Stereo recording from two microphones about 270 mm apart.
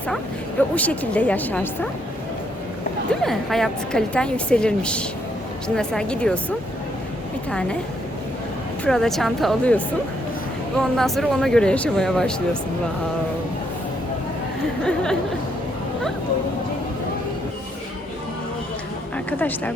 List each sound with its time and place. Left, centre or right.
0.8 s a woman's voice: centre
3.1 s a woman's voice: centre
8.8 s a woman's voice: centre
19.1 s a woman's voice: centre